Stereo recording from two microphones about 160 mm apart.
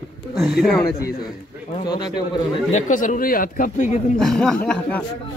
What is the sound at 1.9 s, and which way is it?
Speech, 25° left (ahead or behind).